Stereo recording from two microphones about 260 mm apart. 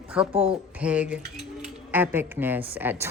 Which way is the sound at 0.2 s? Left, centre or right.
Centre.